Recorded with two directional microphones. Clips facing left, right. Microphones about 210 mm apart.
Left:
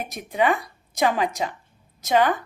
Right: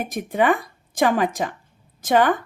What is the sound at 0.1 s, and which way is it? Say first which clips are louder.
A woman's voice: right 2 dB; 50° right (ahead or behind).